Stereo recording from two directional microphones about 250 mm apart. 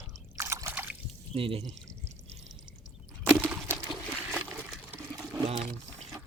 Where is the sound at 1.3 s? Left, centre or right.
Right.